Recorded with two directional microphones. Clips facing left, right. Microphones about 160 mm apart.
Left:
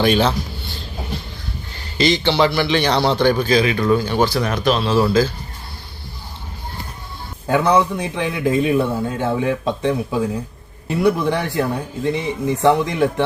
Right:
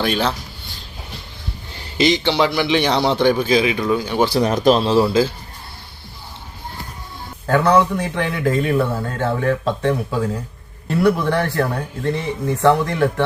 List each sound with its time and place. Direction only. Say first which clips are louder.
0.0 s a man's voice: left 4 dB; centre (ahead or behind)
2.0 s a man's voice: even; 15° right (ahead or behind)
4.3 s speech: right 3 dB; 25° right (ahead or behind)
4.5 s speech: right 4 dB; 40° right (ahead or behind)
7.4 s a man's voice: right 1 dB; 15° left (ahead or behind)